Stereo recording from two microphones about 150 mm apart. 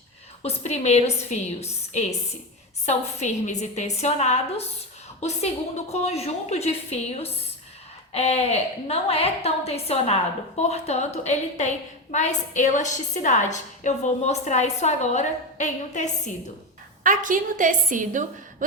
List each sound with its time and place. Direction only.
0.4 s a woman's voice: 50° left (ahead or behind)
5.9 s a woman's voice: 45° left (ahead or behind)
17.0 s a woman's voice: 60° right (ahead or behind)